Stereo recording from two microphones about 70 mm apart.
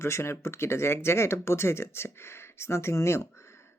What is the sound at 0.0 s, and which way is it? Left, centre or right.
Speech, left.